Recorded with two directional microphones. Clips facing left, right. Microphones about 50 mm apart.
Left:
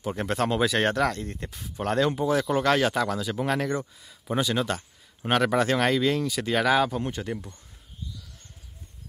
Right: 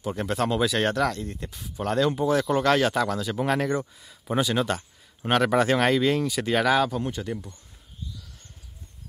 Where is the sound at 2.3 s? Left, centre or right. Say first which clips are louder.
Right 2 dB; centre.